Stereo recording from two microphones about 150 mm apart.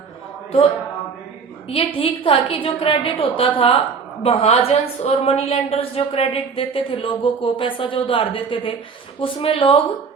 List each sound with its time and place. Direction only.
1.7 s a woman's voice: 35° left (ahead or behind)